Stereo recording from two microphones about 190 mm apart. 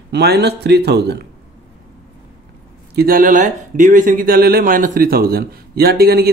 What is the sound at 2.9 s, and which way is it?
Speech, 50° right (ahead or behind).